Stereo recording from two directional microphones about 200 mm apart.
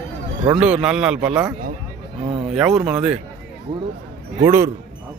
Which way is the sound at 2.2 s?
30° right (ahead or behind).